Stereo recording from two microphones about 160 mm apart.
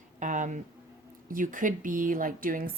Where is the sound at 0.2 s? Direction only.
50° right (ahead or behind).